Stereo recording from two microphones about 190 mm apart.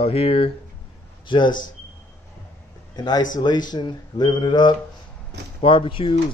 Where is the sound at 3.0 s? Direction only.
20° left (ahead or behind).